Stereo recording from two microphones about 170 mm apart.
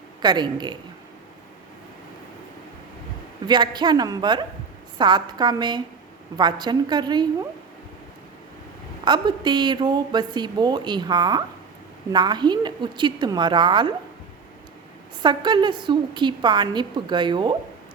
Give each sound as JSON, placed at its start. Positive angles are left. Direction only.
{"t": 0.2, "sound": "a woman's voice", "side_deg": -25}
{"t": 3.4, "sound": "a woman's voice", "side_deg": -25}
{"t": 9.0, "sound": "a woman's voice", "side_deg": -25}
{"t": 15.2, "sound": "a woman's voice", "side_deg": -25}